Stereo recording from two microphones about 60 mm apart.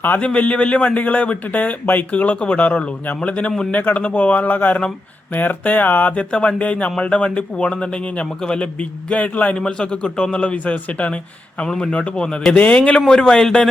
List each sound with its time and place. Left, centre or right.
0.2 s speech: centre